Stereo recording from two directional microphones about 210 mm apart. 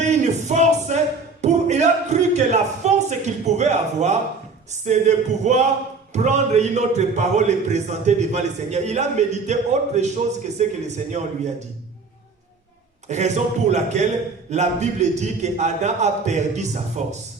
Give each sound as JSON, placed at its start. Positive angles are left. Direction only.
{"t": 0.0, "sound": "a sound", "side_deg": -35}
{"t": 4.7, "sound": "a man's voice", "side_deg": -35}
{"t": 13.1, "sound": "a man's voice", "side_deg": -35}